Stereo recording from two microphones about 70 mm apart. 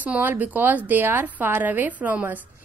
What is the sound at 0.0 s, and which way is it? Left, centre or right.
A woman's voice, right.